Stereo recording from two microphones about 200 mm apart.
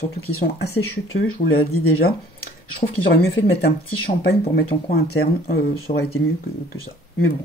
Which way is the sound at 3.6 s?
50° left (ahead or behind).